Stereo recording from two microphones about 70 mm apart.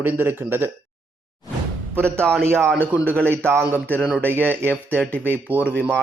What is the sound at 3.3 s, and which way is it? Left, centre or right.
A man's voice, right.